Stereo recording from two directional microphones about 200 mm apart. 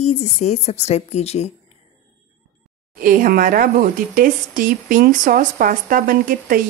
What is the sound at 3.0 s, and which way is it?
A woman's voice, 45° right (ahead or behind).